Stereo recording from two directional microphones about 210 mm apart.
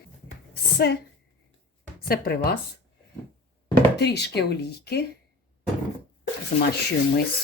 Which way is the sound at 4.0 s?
50° left (ahead or behind).